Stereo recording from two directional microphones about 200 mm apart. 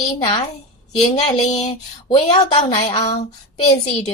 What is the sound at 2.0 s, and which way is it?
Speech, 25° left (ahead or behind).